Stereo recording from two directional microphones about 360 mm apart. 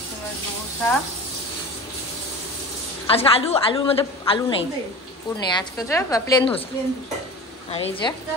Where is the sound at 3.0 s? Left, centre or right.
Centre.